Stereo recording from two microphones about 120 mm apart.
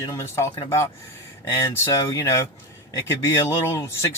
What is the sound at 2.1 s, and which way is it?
Speech, 25° left (ahead or behind).